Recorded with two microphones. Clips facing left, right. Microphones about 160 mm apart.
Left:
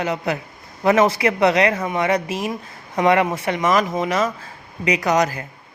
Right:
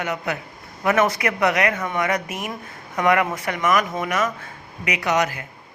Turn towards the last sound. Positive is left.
turn(degrees=35)  # may be behind; listen again after turning